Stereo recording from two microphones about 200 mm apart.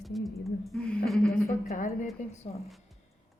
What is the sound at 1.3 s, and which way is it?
A woman's voice, 40° left (ahead or behind).